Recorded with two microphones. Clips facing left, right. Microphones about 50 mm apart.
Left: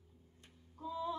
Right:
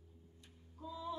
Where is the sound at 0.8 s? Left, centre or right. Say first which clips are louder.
Left 4 dB; left.